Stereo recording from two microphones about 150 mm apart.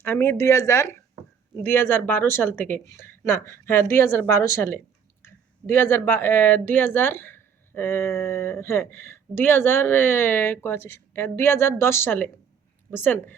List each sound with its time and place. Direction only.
0.0 s speech: 15° left (ahead or behind)